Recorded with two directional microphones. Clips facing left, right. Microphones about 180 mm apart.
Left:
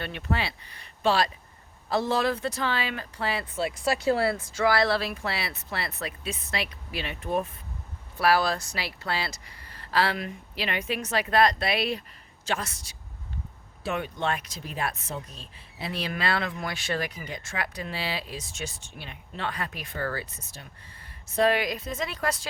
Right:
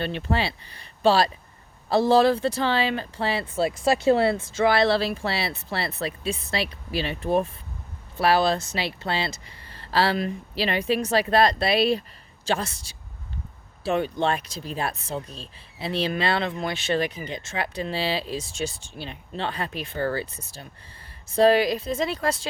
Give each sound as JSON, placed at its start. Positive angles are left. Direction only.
{"t": 0.0, "sound": "speech", "side_deg": -30}